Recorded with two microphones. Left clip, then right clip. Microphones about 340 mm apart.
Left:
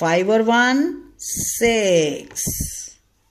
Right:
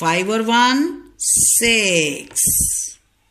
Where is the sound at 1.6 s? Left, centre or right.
Left.